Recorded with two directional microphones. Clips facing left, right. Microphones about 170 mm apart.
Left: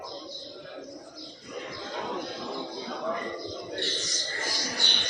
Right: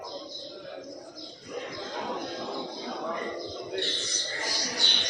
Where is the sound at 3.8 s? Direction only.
40° left (ahead or behind).